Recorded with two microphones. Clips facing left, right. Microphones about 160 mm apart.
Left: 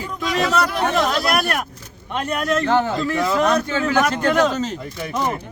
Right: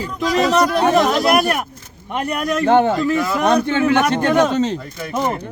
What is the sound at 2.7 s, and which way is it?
A man's voice, 25° right (ahead or behind).